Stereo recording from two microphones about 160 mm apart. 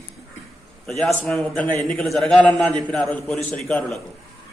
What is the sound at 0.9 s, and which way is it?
A man's voice, centre (ahead or behind).